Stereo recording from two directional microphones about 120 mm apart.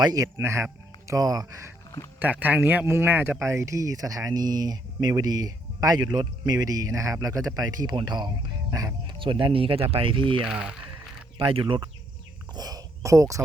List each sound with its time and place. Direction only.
0.0 s speech: 30° right (ahead or behind)
2.1 s speech: 15° right (ahead or behind); by 9.1 s 30° right (ahead or behind)
9.1 s speech: 45° right (ahead or behind)
10.4 s speech: 10° right (ahead or behind)
11.3 s speech: 45° right (ahead or behind)
12.5 s cricket: 30° right (ahead or behind)